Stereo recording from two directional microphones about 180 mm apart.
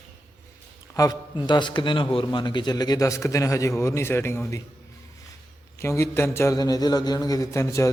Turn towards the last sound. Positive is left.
turn(degrees=15)  # may be behind; listen again after turning